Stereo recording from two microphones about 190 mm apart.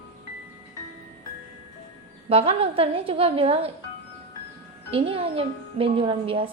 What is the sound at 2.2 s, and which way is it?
Speech, 30° right (ahead or behind).